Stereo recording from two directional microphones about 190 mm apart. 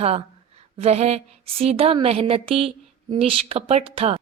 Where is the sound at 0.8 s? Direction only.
35° right (ahead or behind).